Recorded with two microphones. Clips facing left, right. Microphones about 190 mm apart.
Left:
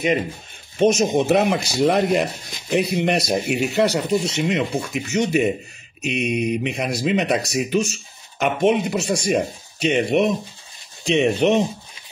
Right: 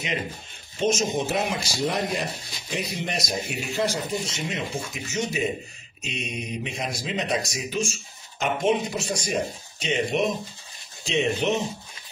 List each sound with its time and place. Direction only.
0.7 s speech: 65° left (ahead or behind)